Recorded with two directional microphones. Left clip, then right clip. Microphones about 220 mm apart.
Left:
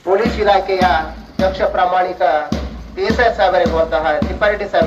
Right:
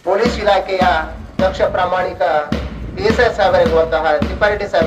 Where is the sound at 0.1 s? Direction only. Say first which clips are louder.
Even; 65° right (ahead or behind).